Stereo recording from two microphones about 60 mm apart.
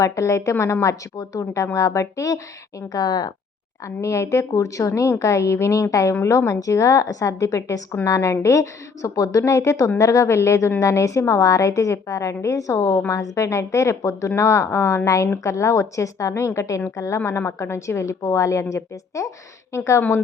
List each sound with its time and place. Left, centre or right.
0.0 s a woman's voice: left
2.9 s speech: left
3.8 s a woman's voice: left
17.2 s a woman's voice: left
20.0 s speech: left